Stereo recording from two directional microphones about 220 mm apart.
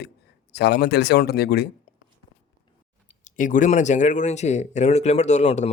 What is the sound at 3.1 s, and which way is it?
A man's voice, 35° left (ahead or behind).